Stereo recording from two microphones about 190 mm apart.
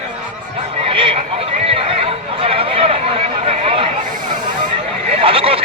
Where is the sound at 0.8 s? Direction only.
30° right (ahead or behind).